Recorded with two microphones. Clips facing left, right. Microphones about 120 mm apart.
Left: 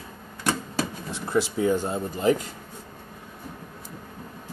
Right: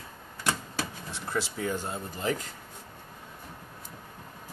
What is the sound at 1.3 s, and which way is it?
Speech, 15° left (ahead or behind).